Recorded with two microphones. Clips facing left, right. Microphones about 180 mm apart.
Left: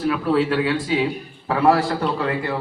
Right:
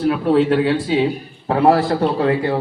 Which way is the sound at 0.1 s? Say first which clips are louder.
Right 4 dB; 30° right (ahead or behind).